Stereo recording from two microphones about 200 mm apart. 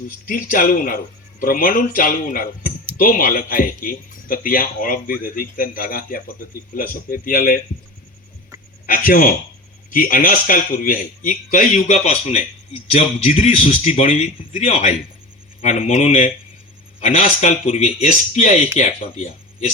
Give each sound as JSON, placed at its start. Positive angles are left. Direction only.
{"t": 0.3, "sound": "speech", "side_deg": 45}
{"t": 8.9, "sound": "speech", "side_deg": 45}